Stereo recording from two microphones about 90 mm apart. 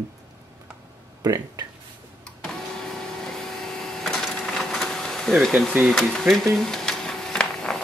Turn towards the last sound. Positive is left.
turn(degrees=5)  # may be behind; listen again after turning